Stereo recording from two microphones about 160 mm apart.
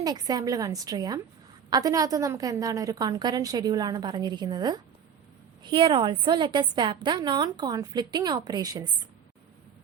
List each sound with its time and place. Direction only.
0.0 s a woman's voice: 25° right (ahead or behind)